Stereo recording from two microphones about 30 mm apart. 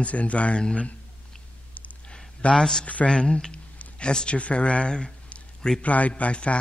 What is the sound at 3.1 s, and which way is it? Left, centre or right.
A man's voice, left.